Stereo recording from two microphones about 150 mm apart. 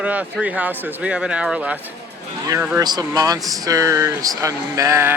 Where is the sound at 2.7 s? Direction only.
25° right (ahead or behind).